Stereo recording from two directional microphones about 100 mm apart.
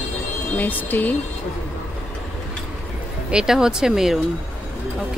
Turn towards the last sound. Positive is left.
turn(degrees=-5)  # may be behind; listen again after turning